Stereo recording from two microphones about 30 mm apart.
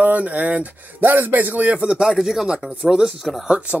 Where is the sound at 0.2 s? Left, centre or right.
Right.